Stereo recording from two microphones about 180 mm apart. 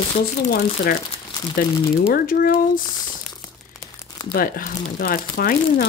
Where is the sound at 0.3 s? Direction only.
55° left (ahead or behind).